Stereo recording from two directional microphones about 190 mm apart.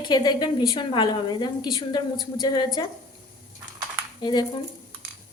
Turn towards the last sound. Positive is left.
turn(degrees=25)  # may be behind; listen again after turning